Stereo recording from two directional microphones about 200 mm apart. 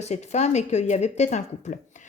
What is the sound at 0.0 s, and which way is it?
Speech, 35° left (ahead or behind).